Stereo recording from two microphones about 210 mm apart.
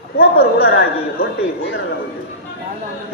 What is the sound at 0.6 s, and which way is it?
Speech, 50° left (ahead or behind).